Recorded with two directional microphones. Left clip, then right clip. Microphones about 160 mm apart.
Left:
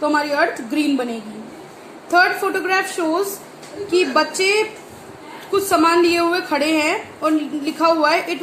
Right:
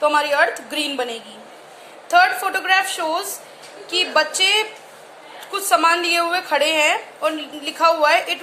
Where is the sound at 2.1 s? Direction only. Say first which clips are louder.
Even; 15° right (ahead or behind).